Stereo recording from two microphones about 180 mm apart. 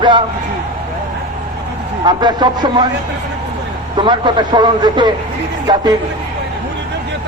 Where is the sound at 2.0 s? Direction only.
25° right (ahead or behind).